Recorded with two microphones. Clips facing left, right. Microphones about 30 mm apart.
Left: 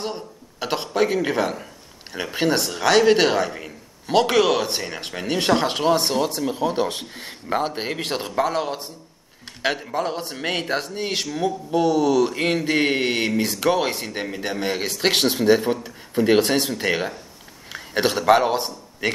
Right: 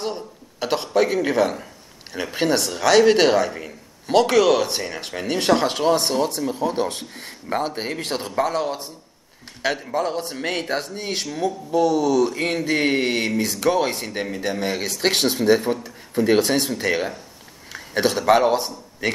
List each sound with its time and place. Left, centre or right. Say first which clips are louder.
0.0 s a sound: right 2 dB; centre
2.1 s speech: even; centre
12.2 s mantra: even; left
12.4 s speech: left 1 dB; centre
13.4 s a man's voice: right 2 dB; centre